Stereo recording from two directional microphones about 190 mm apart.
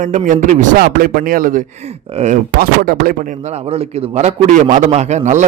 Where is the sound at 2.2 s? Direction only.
35° right (ahead or behind).